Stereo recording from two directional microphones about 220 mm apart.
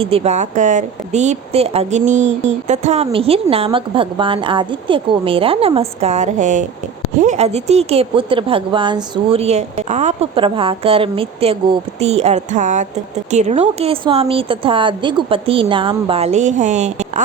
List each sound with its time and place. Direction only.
0.0 s speech: 25° right (ahead or behind)
2.2 s a sound: 60° right (ahead or behind)
2.6 s a woman's voice: 30° right (ahead or behind)